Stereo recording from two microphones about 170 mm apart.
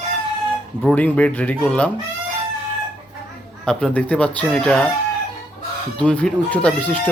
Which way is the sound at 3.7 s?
5° left (ahead or behind).